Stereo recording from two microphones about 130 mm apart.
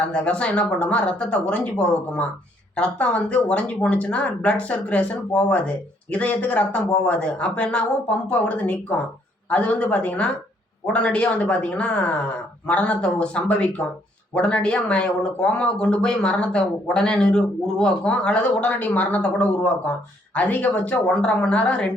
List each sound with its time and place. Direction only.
0.1 s speech: 10° left (ahead or behind)